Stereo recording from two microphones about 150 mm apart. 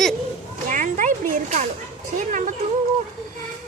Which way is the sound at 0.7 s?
60° right (ahead or behind).